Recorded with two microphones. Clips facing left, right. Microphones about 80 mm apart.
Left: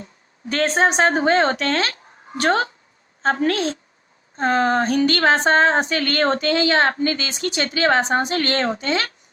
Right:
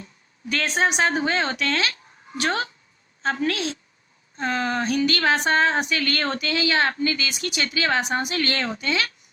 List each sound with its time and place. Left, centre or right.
0.0 s a woman's voice: left